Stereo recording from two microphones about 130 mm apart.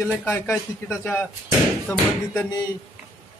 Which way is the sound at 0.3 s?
20° left (ahead or behind).